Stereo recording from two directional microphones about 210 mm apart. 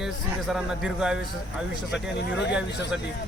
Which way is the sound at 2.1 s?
55° left (ahead or behind).